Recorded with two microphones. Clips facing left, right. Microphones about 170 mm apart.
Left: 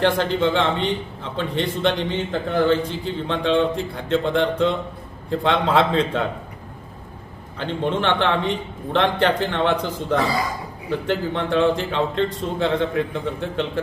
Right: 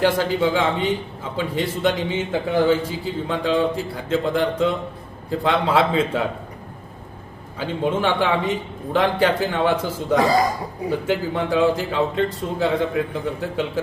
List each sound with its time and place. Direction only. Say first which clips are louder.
0.0 s a man's voice: even; 5° right (ahead or behind)
7.6 s a man's voice: right 1 dB; 5° right (ahead or behind)
10.2 s speech: right 5 dB; 40° right (ahead or behind)
10.8 s a man's voice: right 1 dB; 10° right (ahead or behind)